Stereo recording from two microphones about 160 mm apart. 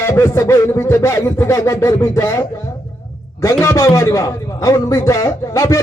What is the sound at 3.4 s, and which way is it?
A man's voice, 20° left (ahead or behind).